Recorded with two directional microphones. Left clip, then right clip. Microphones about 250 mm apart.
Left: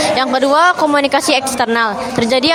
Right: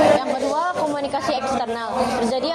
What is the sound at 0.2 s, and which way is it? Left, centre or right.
Speech, left.